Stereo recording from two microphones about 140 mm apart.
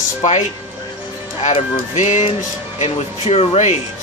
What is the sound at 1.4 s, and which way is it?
Speech, 55° left (ahead or behind).